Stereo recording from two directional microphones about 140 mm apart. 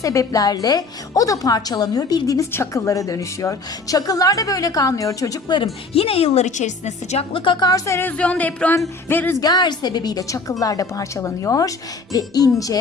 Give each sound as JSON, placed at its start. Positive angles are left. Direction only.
{"t": 0.0, "sound": "a woman's voice", "side_deg": 25}
{"t": 5.9, "sound": "a woman's voice", "side_deg": 45}
{"t": 7.3, "sound": "speech", "side_deg": 35}
{"t": 9.4, "sound": "a woman's voice", "side_deg": 30}